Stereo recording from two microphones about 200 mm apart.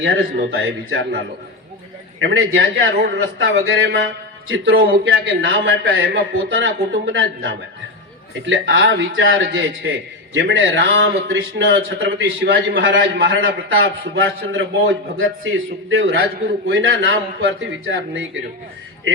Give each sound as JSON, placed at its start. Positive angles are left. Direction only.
{"t": 0.0, "sound": "speech", "side_deg": -80}
{"t": 0.3, "sound": "a man's voice", "side_deg": -65}
{"t": 2.2, "sound": "a man's voice", "side_deg": -60}
{"t": 4.4, "sound": "a man's voice", "side_deg": -80}
{"t": 14.2, "sound": "a man's voice", "side_deg": -75}